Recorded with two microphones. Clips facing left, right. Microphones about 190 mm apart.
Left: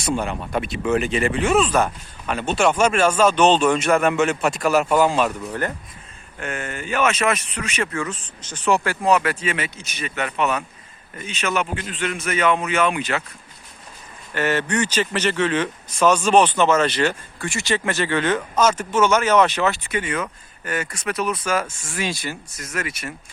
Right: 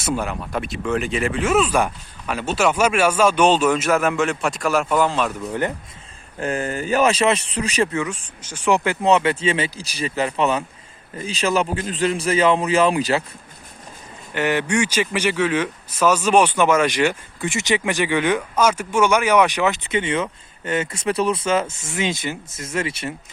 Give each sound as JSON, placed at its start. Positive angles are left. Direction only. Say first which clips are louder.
{"t": 0.0, "sound": "speech", "louder": "even", "side_deg": -5}
{"t": 6.4, "sound": "a man's voice", "louder": "right 6 dB", "side_deg": -35}
{"t": 7.9, "sound": "a man's voice", "louder": "right 2 dB", "side_deg": -10}
{"t": 14.3, "sound": "speech", "louder": "right 1 dB", "side_deg": -15}